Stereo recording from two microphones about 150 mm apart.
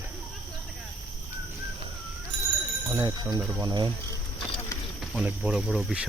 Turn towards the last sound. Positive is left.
turn(degrees=0)  # may be behind; listen again after turning